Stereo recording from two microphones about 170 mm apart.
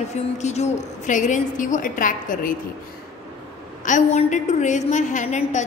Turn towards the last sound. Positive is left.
turn(degrees=45)  # may be behind; listen again after turning